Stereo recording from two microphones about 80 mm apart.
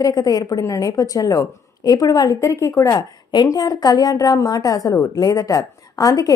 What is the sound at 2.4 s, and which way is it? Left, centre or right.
Speech, left.